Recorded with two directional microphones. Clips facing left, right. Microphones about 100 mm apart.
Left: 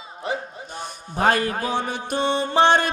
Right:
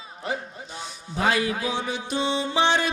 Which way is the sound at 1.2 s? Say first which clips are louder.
Left 3 dB; 50° left (ahead or behind).